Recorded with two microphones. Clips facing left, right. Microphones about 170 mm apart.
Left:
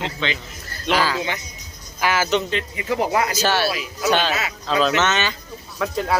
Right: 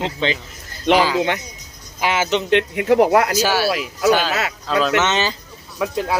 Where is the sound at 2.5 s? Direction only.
65° right (ahead or behind).